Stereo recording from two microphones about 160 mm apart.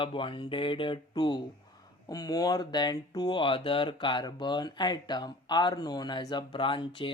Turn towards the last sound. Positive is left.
turn(degrees=30)  # may be behind; listen again after turning